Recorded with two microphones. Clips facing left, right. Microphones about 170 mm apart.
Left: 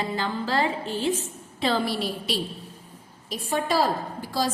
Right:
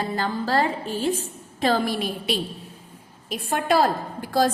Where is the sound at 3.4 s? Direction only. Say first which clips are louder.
Right 3 dB; 55° right (ahead or behind).